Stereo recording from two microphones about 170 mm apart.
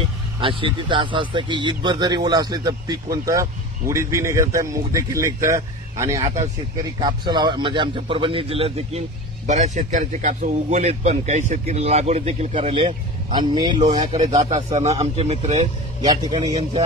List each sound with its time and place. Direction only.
0.4 s a man's voice: 30° right (ahead or behind)
6.2 s a man's voice: 40° right (ahead or behind)
6.8 s a man's voice: 25° right (ahead or behind)
9.5 s a man's voice: 45° right (ahead or behind); by 13.7 s 25° right (ahead or behind)
13.7 s a man's voice: 45° right (ahead or behind)
16.1 s a man's voice: 25° right (ahead or behind)